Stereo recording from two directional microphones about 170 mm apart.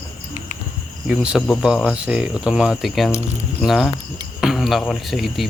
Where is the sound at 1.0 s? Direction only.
5° right (ahead or behind).